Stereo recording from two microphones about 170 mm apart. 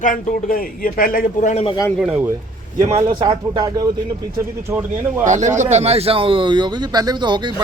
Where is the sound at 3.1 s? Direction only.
25° right (ahead or behind).